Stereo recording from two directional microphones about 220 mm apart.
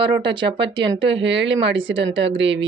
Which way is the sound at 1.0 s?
55° right (ahead or behind).